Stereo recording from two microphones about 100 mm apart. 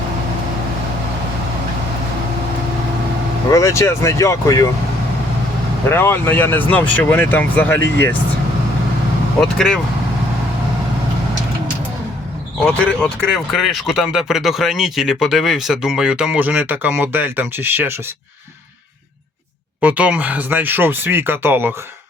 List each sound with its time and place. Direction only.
3.5 s speech: 30° left (ahead or behind)
5.9 s speech: 20° left (ahead or behind)
9.4 s speech: 5° left (ahead or behind)
12.6 s speech: 10° left (ahead or behind); by 17.9 s 20° right (ahead or behind)
19.8 s speech: 15° right (ahead or behind)